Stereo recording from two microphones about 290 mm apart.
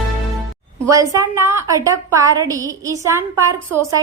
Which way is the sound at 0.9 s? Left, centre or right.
Centre.